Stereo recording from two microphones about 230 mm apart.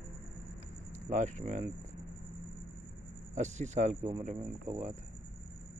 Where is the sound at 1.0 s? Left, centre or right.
Right.